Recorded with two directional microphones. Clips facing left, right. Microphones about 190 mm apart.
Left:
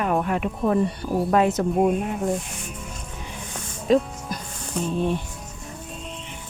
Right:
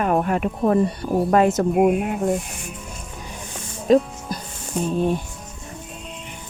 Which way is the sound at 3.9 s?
45° right (ahead or behind).